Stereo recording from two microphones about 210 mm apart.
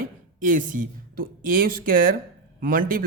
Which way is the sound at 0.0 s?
40° right (ahead or behind).